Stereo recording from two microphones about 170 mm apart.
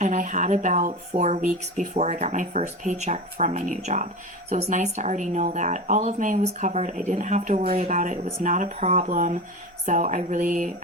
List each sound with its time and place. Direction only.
0.0 s speech: 50° right (ahead or behind)